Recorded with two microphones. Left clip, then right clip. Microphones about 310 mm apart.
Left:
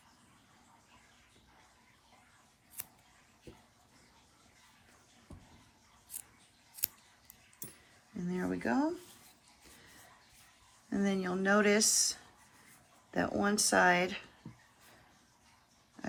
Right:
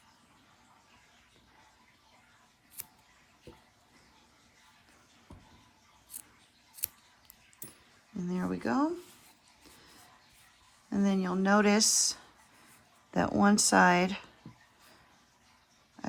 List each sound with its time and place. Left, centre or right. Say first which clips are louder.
8.3 s speech: right 1 dB; centre
10.8 s speech: right 3 dB; centre